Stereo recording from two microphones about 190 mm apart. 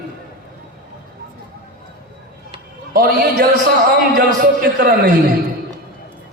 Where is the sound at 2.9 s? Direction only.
50° right (ahead or behind).